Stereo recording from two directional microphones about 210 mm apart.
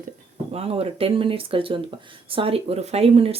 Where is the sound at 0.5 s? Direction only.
30° right (ahead or behind).